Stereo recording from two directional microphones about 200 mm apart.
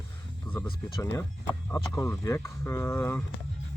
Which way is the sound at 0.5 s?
10° left (ahead or behind).